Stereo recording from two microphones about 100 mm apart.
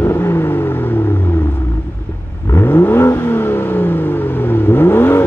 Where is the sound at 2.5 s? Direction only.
20° left (ahead or behind).